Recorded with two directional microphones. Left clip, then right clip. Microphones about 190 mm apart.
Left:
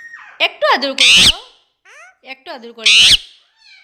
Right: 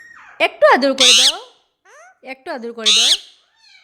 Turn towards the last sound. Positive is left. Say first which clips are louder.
# left 5 dB
turn(degrees=-25)  # may be behind; listen again after turning